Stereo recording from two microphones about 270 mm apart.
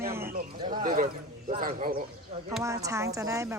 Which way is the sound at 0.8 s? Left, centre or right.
Right.